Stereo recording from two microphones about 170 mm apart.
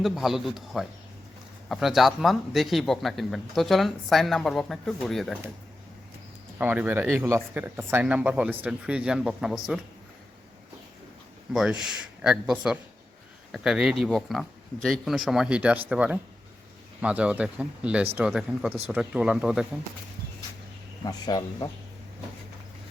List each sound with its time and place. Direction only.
0.0 s speech: centre (ahead or behind)
6.6 s speech: 10° right (ahead or behind)
11.5 s speech: 5° right (ahead or behind)
21.0 s speech: 20° left (ahead or behind)